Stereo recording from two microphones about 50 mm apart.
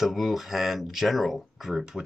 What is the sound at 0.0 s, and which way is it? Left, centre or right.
Speech, centre.